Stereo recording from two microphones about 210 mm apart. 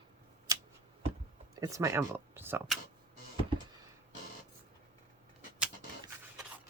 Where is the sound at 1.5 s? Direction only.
15° right (ahead or behind).